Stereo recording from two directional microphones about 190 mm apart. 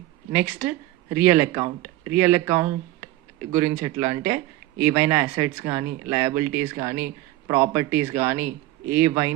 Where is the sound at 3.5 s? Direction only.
10° right (ahead or behind).